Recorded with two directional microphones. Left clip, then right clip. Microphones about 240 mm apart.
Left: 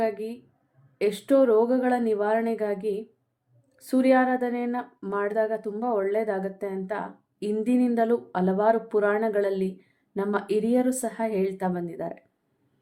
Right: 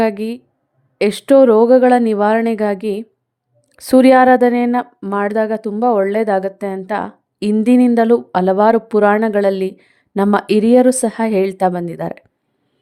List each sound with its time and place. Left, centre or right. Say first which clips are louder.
0.0 s speech: right 10 dB; right